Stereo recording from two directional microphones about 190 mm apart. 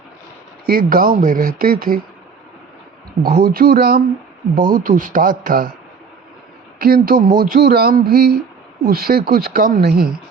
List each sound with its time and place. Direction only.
0.6 s speech: 50° right (ahead or behind)
3.2 s speech: 50° right (ahead or behind)
6.7 s speech: 50° right (ahead or behind)